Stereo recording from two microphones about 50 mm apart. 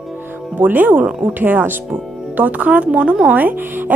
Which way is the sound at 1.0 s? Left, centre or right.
Right.